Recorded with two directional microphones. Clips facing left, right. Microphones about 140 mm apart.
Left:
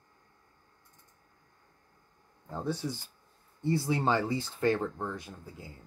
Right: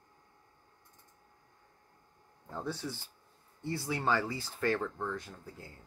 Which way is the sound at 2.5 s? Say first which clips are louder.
Left 4 dB; 15° left (ahead or behind).